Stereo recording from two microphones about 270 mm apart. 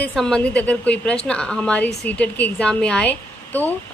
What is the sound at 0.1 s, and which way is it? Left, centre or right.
A woman's voice, centre.